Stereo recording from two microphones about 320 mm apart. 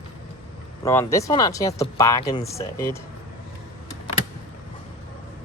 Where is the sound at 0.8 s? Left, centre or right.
Centre.